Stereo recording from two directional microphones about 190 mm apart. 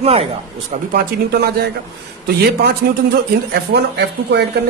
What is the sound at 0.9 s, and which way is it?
A man's voice, 55° right (ahead or behind).